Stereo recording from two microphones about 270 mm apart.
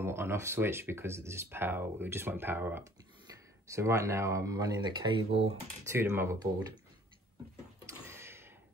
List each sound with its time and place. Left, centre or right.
0.0 s speech: centre
5.9 s speech: centre
7.8 s a sound: centre